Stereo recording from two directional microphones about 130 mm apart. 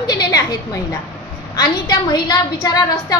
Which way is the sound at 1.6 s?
30° left (ahead or behind).